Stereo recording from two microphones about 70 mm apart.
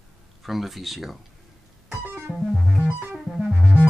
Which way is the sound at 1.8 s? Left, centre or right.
Right.